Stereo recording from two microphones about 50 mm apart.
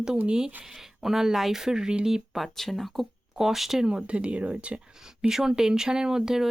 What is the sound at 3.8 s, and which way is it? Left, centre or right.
Speech, centre.